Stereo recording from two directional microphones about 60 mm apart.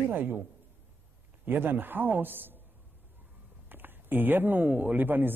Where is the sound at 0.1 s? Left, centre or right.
Right.